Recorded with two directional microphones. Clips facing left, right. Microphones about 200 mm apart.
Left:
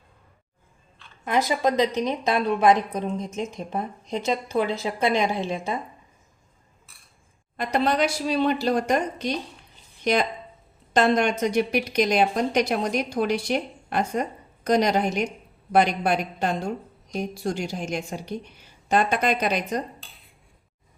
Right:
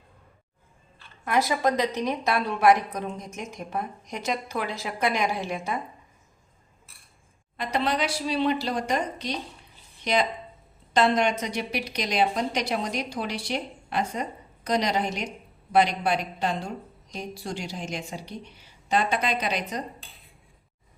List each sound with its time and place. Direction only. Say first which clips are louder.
1.2 s a woman's voice: left 1 dB; 20° left (ahead or behind)
7.5 s a woman's voice: left 4 dB; 45° left (ahead or behind)